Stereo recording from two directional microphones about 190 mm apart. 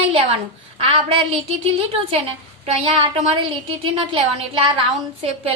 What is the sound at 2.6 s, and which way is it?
A woman's voice, 30° right (ahead or behind).